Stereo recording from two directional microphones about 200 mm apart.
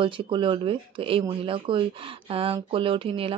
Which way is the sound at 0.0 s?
25° right (ahead or behind).